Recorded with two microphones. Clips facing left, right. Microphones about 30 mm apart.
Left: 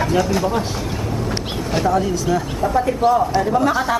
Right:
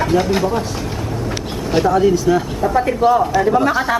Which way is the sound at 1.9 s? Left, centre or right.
Centre.